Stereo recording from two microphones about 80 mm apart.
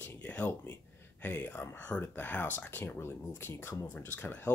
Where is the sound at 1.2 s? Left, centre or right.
Left.